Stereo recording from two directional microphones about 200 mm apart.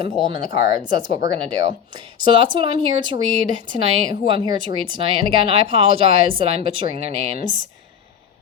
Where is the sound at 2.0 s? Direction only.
25° right (ahead or behind).